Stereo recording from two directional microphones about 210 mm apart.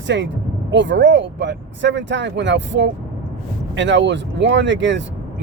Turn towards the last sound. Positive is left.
turn(degrees=-60)  # may be behind; listen again after turning